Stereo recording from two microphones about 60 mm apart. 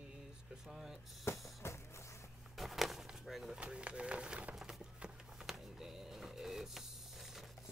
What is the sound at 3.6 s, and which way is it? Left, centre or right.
Speech, centre.